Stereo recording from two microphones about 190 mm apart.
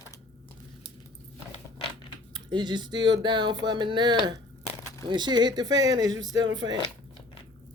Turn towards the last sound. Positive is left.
turn(degrees=-20)  # may be behind; listen again after turning